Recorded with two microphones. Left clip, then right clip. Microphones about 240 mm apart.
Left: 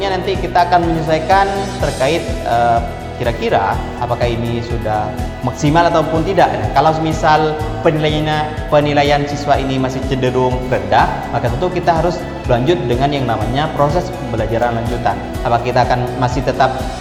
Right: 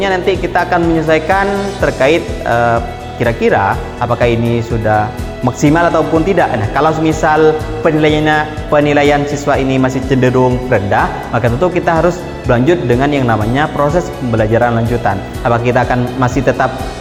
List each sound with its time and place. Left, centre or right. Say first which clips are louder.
0.0 s speech: right 4 dB; right
5.6 s speech: right 1 dB; right